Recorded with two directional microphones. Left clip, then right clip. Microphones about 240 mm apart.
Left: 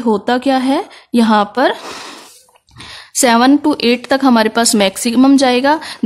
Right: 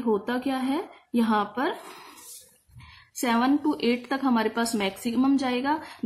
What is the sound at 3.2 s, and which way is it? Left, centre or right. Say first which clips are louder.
Speech: left 14 dB; left.